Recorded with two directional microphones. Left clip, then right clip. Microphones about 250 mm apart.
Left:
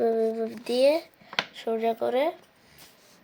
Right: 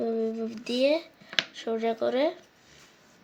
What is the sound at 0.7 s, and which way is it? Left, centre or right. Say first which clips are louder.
Speech: left 3 dB; centre.